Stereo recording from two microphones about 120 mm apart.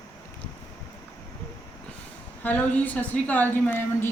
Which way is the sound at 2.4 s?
15° left (ahead or behind).